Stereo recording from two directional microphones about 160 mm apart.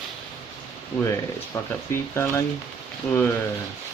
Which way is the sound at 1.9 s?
15° left (ahead or behind).